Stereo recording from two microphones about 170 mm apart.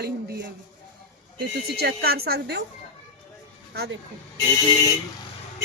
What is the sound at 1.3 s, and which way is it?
A man's voice, 70° right (ahead or behind).